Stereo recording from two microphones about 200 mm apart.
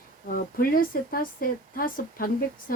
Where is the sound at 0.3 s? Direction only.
45° left (ahead or behind).